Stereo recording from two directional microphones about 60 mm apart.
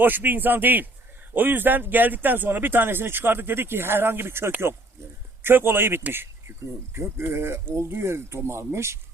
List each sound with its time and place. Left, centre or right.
0.0 s speech: right
6.9 s speech: right